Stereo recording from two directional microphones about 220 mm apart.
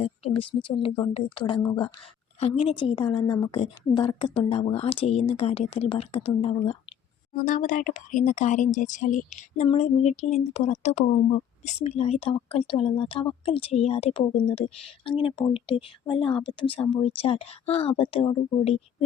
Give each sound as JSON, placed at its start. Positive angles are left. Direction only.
{"t": 0.0, "sound": "speech", "side_deg": 25}